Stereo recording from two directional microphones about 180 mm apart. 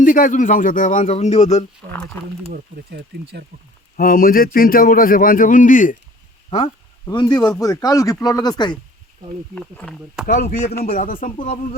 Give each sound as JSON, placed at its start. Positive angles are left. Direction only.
{"t": 0.0, "sound": "a man's voice", "side_deg": 50}
{"t": 1.9, "sound": "speech", "side_deg": 5}
{"t": 3.9, "sound": "a man's voice", "side_deg": 50}
{"t": 7.0, "sound": "speech", "side_deg": 25}
{"t": 9.6, "sound": "speech", "side_deg": 5}
{"t": 10.2, "sound": "a man's voice", "side_deg": 50}